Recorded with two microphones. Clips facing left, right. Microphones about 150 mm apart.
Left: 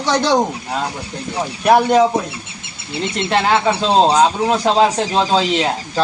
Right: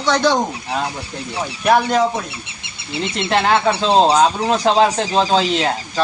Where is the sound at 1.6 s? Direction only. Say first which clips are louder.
Left 3 dB; 15° left (ahead or behind).